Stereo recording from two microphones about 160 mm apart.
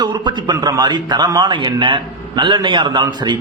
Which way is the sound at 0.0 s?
30° right (ahead or behind).